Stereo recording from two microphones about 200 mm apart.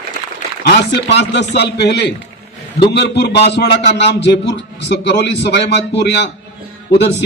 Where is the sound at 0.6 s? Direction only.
60° left (ahead or behind).